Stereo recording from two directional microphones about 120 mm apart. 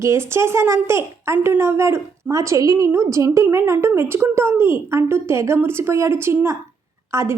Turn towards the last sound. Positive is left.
turn(degrees=-25)  # may be behind; listen again after turning